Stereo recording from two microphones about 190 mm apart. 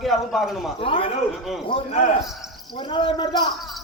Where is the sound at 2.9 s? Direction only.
25° left (ahead or behind).